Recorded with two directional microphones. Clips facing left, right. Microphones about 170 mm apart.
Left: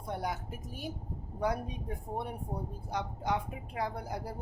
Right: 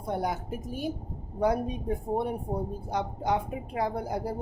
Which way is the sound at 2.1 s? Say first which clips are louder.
Right 6 dB; 30° right (ahead or behind).